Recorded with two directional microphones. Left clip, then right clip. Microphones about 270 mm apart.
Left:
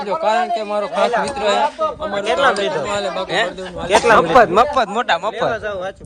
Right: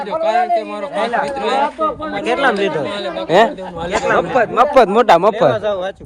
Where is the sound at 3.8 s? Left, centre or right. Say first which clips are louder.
Left 4 dB; left.